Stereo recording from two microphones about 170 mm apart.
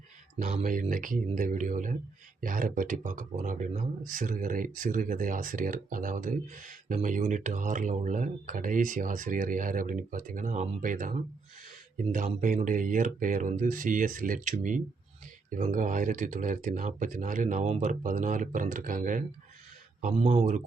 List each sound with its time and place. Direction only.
0.3 s speech: 50° right (ahead or behind)
12.1 s speech: 50° right (ahead or behind)